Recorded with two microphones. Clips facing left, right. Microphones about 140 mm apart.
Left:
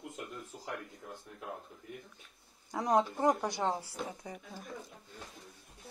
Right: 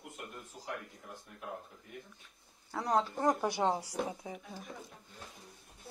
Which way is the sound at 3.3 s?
10° right (ahead or behind).